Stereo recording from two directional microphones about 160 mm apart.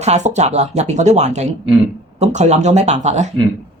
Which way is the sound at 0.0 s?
45° right (ahead or behind).